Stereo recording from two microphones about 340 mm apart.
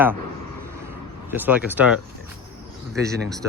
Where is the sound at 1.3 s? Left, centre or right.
Centre.